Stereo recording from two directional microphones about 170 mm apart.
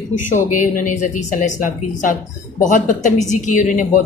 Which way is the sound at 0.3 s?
50° left (ahead or behind).